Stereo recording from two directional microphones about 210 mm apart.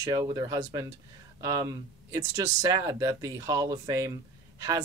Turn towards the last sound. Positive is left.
turn(degrees=-15)  # may be behind; listen again after turning